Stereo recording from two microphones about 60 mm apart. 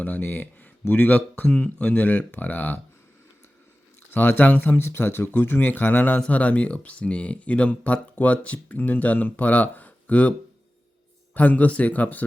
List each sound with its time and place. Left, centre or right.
0.0 s speech: left
4.1 s speech: left
4.8 s speech: left
11.3 s speech: left